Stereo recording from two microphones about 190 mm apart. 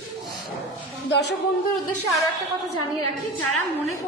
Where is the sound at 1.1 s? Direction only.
65° left (ahead or behind).